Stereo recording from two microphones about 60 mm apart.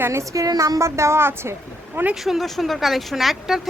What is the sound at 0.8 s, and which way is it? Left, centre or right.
Speech, right.